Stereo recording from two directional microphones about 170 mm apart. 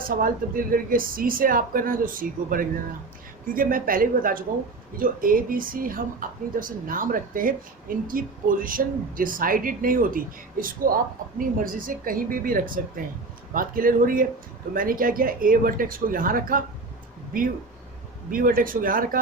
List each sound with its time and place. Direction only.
0.1 s a woman's voice: 55° right (ahead or behind)
18.3 s a woman's voice: 55° right (ahead or behind)